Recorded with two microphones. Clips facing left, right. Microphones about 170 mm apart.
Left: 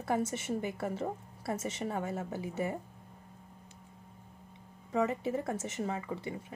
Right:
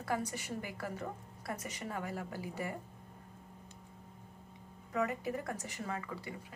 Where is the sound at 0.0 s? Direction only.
25° left (ahead or behind).